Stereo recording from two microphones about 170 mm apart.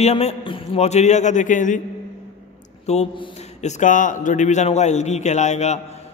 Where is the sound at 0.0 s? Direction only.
40° left (ahead or behind).